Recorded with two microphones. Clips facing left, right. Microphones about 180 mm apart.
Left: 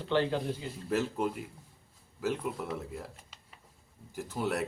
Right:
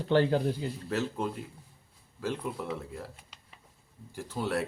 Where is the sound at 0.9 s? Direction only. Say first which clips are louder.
Left 3 dB; 10° left (ahead or behind).